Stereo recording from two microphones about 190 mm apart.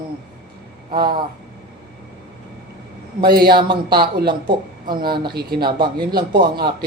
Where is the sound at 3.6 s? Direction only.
25° right (ahead or behind).